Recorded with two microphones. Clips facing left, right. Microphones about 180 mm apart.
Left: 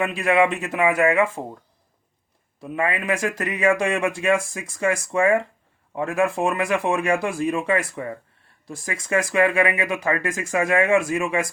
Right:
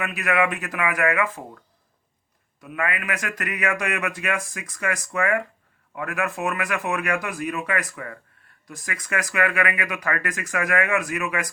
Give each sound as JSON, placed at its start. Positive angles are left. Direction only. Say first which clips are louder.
{"t": 0.0, "sound": "speech", "louder": "left 4 dB", "side_deg": 30}
{"t": 2.6, "sound": "speech", "louder": "left 4 dB", "side_deg": 30}